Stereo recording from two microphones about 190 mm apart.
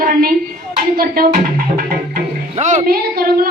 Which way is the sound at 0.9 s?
50° right (ahead or behind).